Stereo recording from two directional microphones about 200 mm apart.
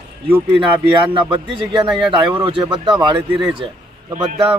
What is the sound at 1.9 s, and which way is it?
Speech, 5° right (ahead or behind).